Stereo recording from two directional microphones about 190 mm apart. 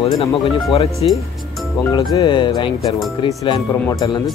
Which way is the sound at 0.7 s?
30° left (ahead or behind).